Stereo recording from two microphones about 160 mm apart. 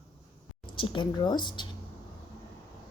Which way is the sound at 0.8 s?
30° left (ahead or behind).